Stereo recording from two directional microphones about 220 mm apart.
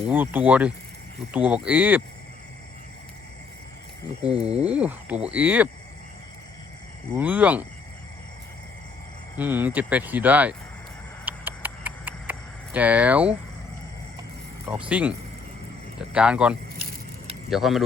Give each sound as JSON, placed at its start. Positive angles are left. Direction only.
{"t": 0.1, "sound": "speech", "side_deg": -10}
{"t": 4.3, "sound": "speech", "side_deg": -25}
{"t": 4.5, "sound": "speech", "side_deg": -5}
{"t": 7.2, "sound": "speech", "side_deg": -5}
{"t": 9.4, "sound": "speech", "side_deg": -10}
{"t": 11.3, "sound": "a sound", "side_deg": -10}
{"t": 14.7, "sound": "speech", "side_deg": -5}